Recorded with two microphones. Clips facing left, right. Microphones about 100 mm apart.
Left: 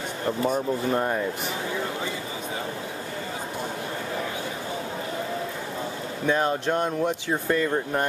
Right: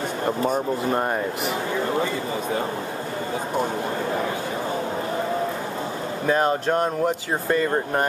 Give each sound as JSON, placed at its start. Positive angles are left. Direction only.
{"t": 0.4, "sound": "speech", "side_deg": -20}
{"t": 6.2, "sound": "speech", "side_deg": -5}